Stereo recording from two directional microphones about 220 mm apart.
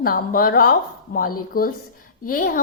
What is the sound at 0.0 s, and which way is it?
Speech, 40° left (ahead or behind).